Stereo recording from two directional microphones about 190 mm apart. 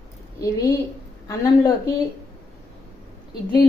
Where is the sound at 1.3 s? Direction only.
20° left (ahead or behind).